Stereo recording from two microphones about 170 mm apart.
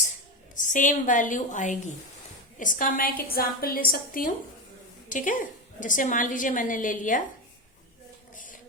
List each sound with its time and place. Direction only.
0.5 s a woman's voice: 50° left (ahead or behind)